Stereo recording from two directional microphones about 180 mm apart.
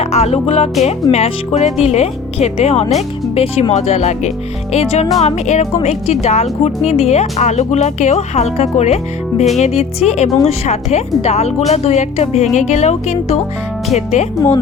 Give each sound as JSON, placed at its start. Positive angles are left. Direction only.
{"t": 0.0, "sound": "speech", "side_deg": 35}